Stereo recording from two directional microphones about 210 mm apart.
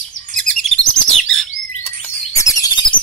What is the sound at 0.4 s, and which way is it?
Chirp, 5° left (ahead or behind).